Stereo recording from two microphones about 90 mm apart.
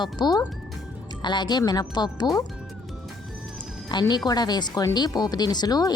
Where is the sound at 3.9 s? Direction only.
50° left (ahead or behind).